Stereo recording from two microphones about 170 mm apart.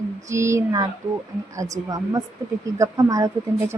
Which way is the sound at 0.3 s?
15° right (ahead or behind).